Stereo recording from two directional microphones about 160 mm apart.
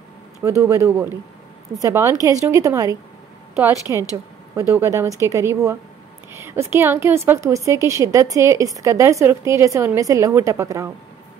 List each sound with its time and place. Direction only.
0.4 s a woman's voice: 20° right (ahead or behind)
3.7 s a woman's voice: 20° left (ahead or behind)
4.6 s a woman's voice: 15° right (ahead or behind)